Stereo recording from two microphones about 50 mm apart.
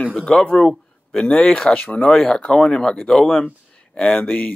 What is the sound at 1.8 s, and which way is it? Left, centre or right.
Speech, left.